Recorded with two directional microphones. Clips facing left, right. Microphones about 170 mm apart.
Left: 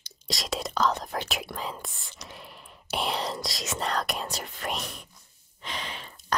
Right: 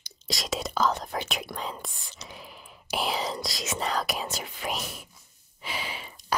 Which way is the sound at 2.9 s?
Centre (ahead or behind).